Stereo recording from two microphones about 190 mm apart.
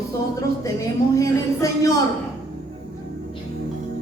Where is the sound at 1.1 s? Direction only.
15° left (ahead or behind).